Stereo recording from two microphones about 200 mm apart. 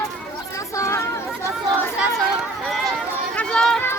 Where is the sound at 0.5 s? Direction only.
15° left (ahead or behind).